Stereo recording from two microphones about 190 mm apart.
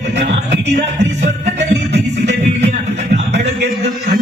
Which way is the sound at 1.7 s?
65° right (ahead or behind).